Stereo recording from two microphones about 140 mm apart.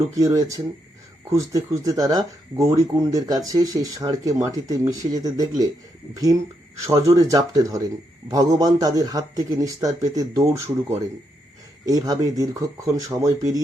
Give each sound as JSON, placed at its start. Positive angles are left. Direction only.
{"t": 0.1, "sound": "speech", "side_deg": -25}
{"t": 6.8, "sound": "speech", "side_deg": -25}